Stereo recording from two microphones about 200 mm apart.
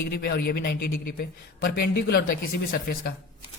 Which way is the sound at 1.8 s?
55° left (ahead or behind).